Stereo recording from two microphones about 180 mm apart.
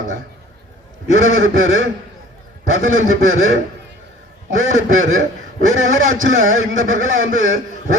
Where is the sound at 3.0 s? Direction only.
90° right.